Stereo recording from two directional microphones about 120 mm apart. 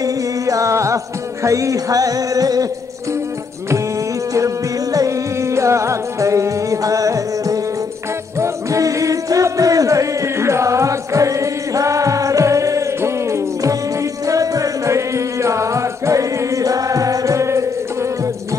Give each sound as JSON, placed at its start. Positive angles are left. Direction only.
{"t": 0.0, "sound": "music", "side_deg": -30}
{"t": 4.9, "sound": "music", "side_deg": -25}